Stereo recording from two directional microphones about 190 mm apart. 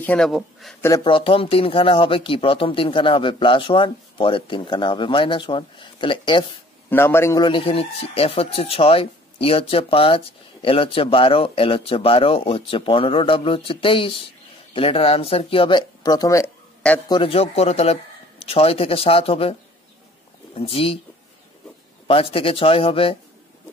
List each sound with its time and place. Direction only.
0.0 s speech: 5° left (ahead or behind)
0.7 s speech: 15° left (ahead or behind)
1.0 s a man's voice: 30° left (ahead or behind)
6.9 s a man's voice: 10° left (ahead or behind)
17.1 s a man's voice: 30° left (ahead or behind)
20.5 s speech: 30° left (ahead or behind)
22.0 s a man's voice: 30° left (ahead or behind)